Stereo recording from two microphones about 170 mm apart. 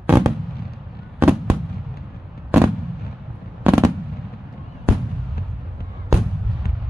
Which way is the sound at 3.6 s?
15° right (ahead or behind).